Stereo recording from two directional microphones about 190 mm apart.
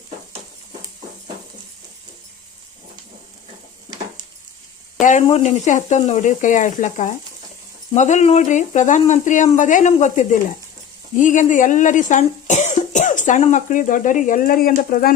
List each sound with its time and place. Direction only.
4.9 s speech: 40° left (ahead or behind)